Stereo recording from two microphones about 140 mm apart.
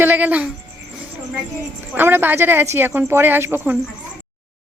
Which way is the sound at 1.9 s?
15° right (ahead or behind).